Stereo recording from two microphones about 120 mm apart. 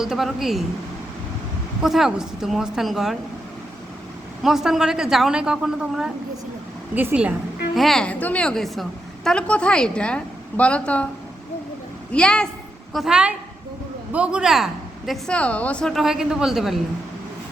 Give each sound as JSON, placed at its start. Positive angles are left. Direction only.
{"t": 0.0, "sound": "a woman's voice", "side_deg": 0}
{"t": 1.8, "sound": "a woman's voice", "side_deg": -5}
{"t": 4.4, "sound": "a woman's voice", "side_deg": -5}
{"t": 7.8, "sound": "a woman's voice", "side_deg": 5}
{"t": 12.1, "sound": "a woman's voice", "side_deg": 5}
{"t": 12.9, "sound": "a woman's voice", "side_deg": -5}